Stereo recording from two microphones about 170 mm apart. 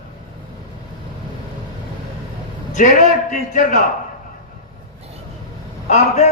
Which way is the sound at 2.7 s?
50° left (ahead or behind).